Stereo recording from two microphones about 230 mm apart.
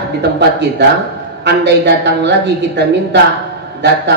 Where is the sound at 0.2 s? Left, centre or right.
Right.